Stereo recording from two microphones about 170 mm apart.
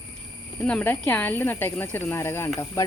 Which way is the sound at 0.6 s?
10° left (ahead or behind).